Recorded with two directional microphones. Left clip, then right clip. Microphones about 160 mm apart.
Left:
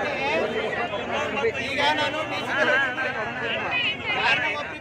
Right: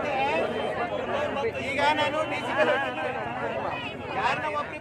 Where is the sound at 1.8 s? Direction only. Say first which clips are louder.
Even; centre (ahead or behind).